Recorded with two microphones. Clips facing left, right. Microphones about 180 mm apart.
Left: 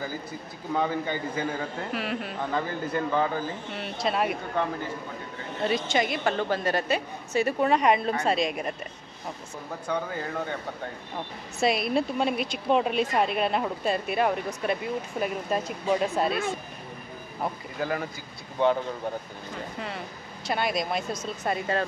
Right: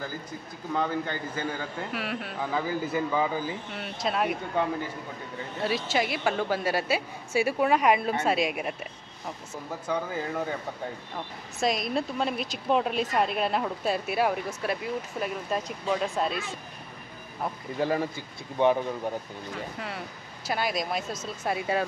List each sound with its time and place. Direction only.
0.7 s a woman's voice: 5° left (ahead or behind)
5.6 s a woman's voice: 5° right (ahead or behind)
9.8 s a woman's voice: 5° right (ahead or behind)
11.6 s a woman's voice: 5° left (ahead or behind)
17.7 s speech: 30° right (ahead or behind)
20.4 s a woman's voice: centre (ahead or behind)